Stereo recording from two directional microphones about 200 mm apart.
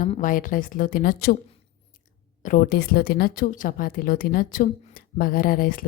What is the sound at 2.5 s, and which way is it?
A woman's voice, 45° left (ahead or behind).